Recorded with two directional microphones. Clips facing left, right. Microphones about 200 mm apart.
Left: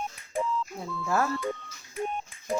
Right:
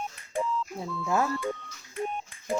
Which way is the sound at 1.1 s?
15° right (ahead or behind).